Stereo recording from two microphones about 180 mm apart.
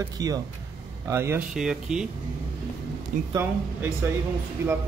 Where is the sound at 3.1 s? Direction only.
45° right (ahead or behind).